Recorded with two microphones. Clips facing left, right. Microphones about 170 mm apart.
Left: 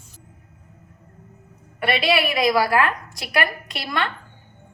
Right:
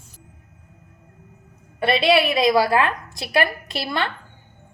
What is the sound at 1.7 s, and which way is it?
A woman's voice, 25° right (ahead or behind).